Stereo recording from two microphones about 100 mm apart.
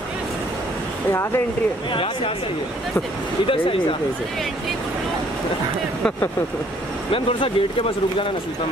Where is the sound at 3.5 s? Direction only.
65° left (ahead or behind).